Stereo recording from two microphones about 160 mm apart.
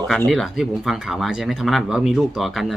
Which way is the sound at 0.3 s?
Centre (ahead or behind).